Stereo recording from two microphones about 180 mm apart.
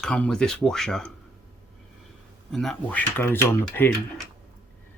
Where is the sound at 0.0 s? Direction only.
5° left (ahead or behind).